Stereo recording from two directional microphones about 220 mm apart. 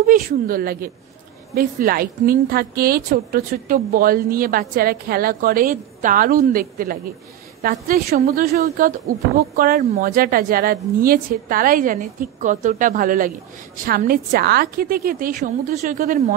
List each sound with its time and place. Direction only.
0.0 s a woman's voice: 40° right (ahead or behind)